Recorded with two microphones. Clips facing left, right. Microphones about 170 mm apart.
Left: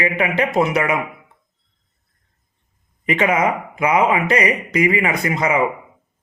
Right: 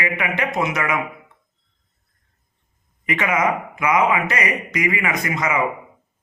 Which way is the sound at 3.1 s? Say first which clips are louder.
Left 3 dB; 30° left (ahead or behind).